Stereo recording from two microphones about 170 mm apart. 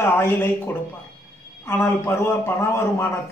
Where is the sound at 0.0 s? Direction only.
15° left (ahead or behind).